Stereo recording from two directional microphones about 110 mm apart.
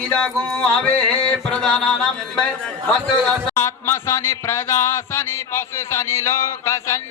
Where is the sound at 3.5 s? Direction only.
25° left (ahead or behind).